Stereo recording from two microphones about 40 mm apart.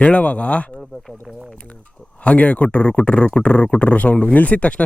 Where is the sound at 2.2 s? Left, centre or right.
Left.